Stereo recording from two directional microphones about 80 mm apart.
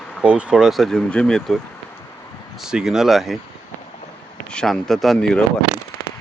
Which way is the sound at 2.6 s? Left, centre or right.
Centre.